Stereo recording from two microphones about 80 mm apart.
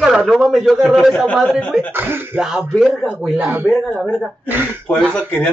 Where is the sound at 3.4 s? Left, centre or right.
Right.